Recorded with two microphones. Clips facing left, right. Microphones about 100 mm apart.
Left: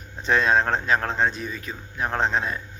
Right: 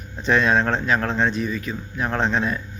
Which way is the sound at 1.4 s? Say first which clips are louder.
Right 7 dB; 30° left (ahead or behind).